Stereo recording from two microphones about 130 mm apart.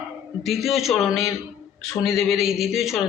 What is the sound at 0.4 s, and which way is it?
A man's voice, centre (ahead or behind).